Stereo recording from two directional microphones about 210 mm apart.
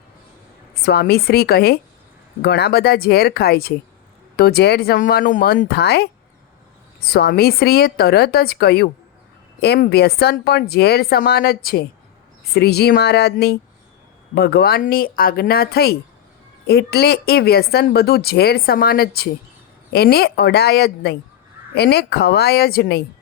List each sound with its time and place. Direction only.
0.8 s speech: 50° left (ahead or behind)
7.1 s speech: 50° left (ahead or behind)